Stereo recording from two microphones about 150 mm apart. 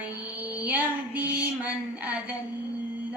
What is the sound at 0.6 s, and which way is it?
A woman's voice, 10° right (ahead or behind).